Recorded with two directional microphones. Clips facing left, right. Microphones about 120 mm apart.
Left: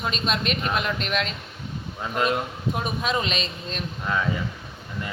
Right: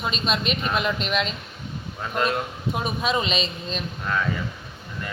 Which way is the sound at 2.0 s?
15° left (ahead or behind).